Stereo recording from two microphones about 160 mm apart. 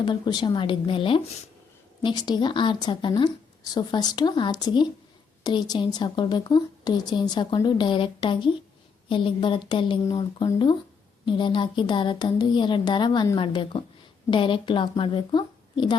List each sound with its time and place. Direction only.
0.0 s a woman's voice: 25° left (ahead or behind)